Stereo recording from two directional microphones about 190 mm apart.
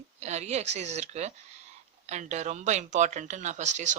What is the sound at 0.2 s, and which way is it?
Speech, 35° right (ahead or behind).